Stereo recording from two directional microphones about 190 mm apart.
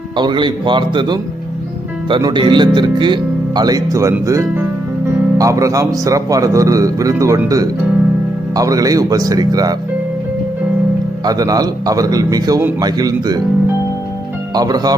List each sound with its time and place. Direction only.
0.2 s a man's voice: 25° right (ahead or behind)
11.3 s speech: 20° right (ahead or behind)
14.5 s speech: 20° right (ahead or behind)